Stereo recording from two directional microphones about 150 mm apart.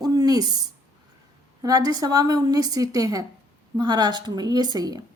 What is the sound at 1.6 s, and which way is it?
A woman's voice, 25° right (ahead or behind).